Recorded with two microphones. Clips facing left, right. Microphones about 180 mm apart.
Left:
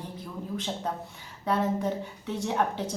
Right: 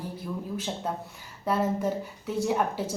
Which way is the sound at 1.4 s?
5° right (ahead or behind).